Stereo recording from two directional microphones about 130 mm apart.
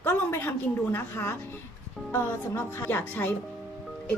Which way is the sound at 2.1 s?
15° left (ahead or behind).